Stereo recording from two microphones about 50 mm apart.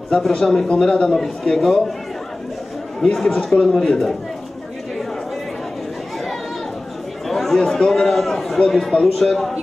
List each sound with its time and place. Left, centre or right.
0.3 s speech: centre
3.0 s speech: centre
7.2 s speech: centre